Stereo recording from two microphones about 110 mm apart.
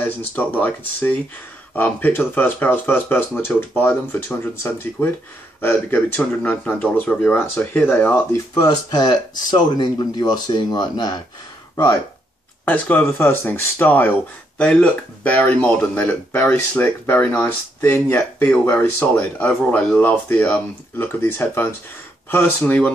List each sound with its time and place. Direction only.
0.0 s speech: 15° left (ahead or behind)
8.6 s speech: 40° left (ahead or behind)
12.6 s speech: 15° left (ahead or behind)